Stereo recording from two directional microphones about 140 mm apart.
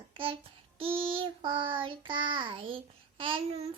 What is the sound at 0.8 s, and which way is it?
Child singing, 40° right (ahead or behind).